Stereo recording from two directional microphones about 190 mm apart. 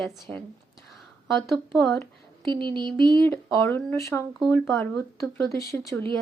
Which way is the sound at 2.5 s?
25° right (ahead or behind).